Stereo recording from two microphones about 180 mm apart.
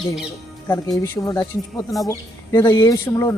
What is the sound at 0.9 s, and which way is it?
A man's voice, 15° left (ahead or behind).